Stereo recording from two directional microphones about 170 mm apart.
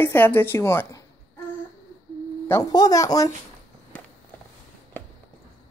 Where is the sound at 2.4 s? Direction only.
20° left (ahead or behind).